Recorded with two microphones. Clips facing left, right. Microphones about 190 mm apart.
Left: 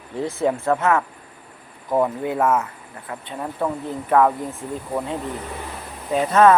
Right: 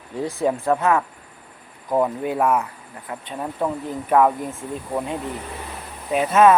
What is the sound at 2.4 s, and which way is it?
Speech, 15° right (ahead or behind).